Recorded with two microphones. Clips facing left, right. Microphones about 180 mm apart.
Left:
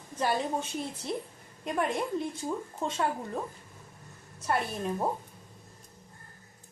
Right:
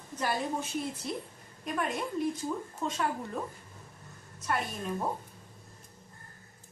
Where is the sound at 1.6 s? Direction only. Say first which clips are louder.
Left 3 dB; 25° left (ahead or behind).